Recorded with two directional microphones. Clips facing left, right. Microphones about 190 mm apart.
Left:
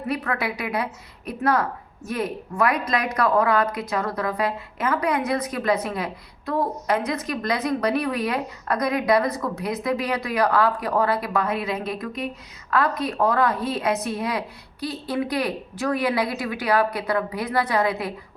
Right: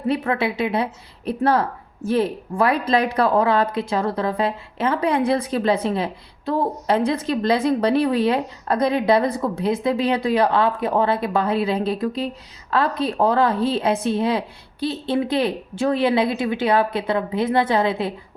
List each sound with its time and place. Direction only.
0.1 s a woman's voice: 25° right (ahead or behind)